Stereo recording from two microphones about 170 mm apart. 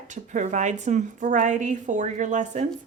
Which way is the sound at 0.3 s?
45° right (ahead or behind).